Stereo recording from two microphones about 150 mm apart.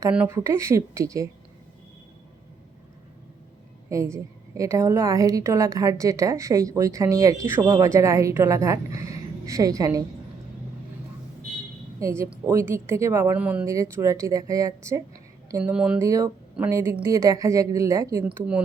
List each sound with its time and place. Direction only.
0.3 s a woman's voice: 20° right (ahead or behind)
3.8 s a woman's voice: 20° right (ahead or behind)
11.9 s a woman's voice: 20° right (ahead or behind)
13.9 s a woman's voice: 20° right (ahead or behind)
16.0 s a woman's voice: 20° right (ahead or behind)
18.3 s speech: 10° right (ahead or behind)